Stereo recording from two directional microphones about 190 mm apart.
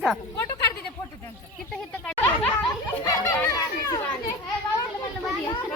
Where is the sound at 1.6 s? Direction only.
5° left (ahead or behind).